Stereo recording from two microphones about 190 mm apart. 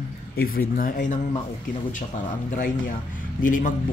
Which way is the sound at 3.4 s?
45° left (ahead or behind).